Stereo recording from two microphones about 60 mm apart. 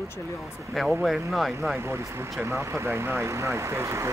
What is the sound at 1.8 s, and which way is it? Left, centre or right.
Speech, right.